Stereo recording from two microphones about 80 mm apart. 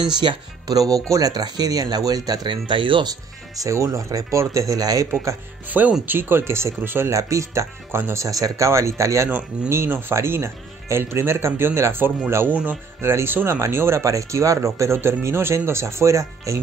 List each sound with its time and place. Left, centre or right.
0.7 s speech: right
2.7 s speech: right
3.5 s speech: right
5.7 s speech: right
7.1 s speech: right